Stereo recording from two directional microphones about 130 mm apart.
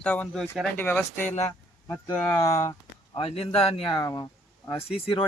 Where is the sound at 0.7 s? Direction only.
15° left (ahead or behind).